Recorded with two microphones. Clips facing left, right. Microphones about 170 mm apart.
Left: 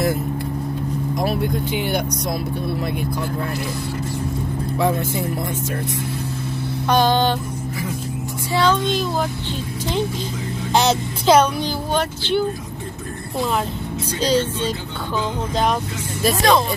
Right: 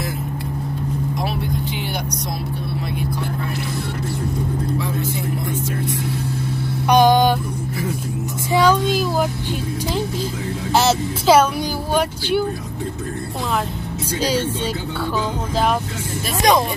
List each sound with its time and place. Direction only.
1.9 s speech: 50° left (ahead or behind)
6.9 s speech: 15° right (ahead or behind)
8.5 s speech: 10° right (ahead or behind)
10.7 s speech: 5° right (ahead or behind)
14.2 s speech: 10° right (ahead or behind)
16.4 s speech: 20° right (ahead or behind)